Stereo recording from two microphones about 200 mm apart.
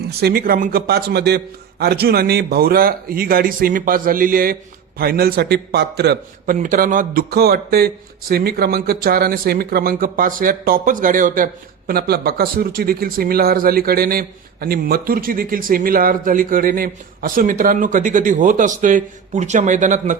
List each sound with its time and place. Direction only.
0.2 s speech: 50° right (ahead or behind)